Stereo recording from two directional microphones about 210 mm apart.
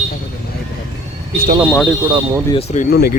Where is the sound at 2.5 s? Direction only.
30° left (ahead or behind).